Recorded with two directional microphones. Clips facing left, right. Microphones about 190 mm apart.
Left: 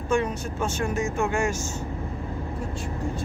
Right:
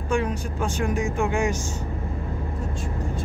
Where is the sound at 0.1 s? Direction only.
10° right (ahead or behind).